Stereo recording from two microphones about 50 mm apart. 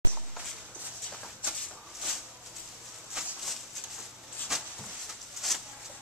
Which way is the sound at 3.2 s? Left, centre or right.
Centre.